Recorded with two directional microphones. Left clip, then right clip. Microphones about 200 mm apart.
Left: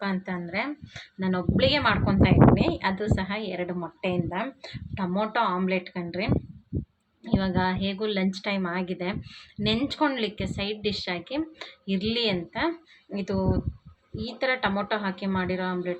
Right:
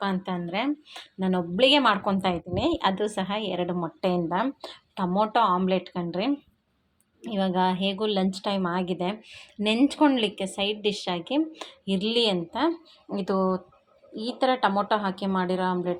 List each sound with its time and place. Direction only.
0.0 s speech: 25° right (ahead or behind)